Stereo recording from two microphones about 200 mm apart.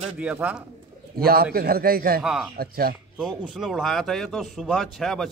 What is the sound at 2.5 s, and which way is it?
Speech, 50° right (ahead or behind).